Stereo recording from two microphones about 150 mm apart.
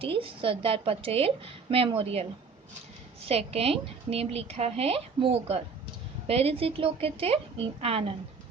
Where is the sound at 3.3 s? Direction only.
40° right (ahead or behind).